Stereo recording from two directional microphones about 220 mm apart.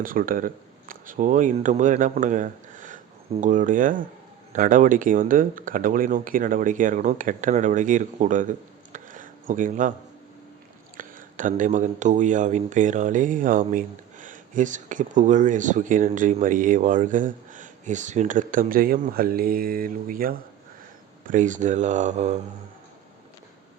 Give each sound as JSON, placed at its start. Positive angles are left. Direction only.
{"t": 0.0, "sound": "speech", "side_deg": -40}
{"t": 10.9, "sound": "speech", "side_deg": -35}